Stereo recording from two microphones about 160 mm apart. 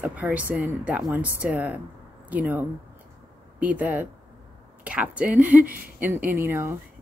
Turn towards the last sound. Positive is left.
turn(degrees=-15)  # may be behind; listen again after turning